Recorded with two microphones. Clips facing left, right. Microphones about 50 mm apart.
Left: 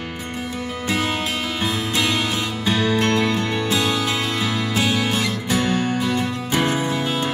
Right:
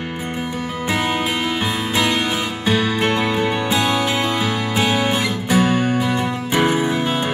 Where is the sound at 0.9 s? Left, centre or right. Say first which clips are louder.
Right 3 dB; centre.